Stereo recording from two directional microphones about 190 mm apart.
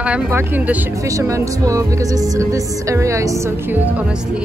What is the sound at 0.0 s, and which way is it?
Speech, 5° right (ahead or behind).